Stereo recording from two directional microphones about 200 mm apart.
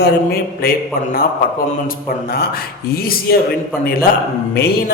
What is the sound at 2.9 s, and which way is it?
Speech, 50° left (ahead or behind).